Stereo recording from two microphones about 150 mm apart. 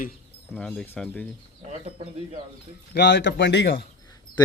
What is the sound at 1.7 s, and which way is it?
Speech, 50° right (ahead or behind).